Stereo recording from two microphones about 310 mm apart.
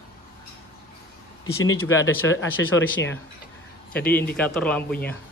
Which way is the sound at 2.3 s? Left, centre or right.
Left.